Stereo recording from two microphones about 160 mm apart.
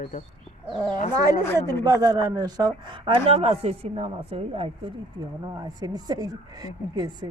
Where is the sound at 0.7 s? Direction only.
25° right (ahead or behind).